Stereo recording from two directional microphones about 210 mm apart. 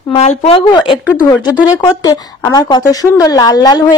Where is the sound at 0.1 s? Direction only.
30° left (ahead or behind).